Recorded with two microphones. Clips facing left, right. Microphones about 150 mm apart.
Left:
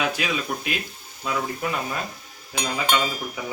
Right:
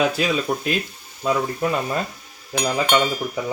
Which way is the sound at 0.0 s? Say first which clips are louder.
Right 6 dB; 35° right (ahead or behind).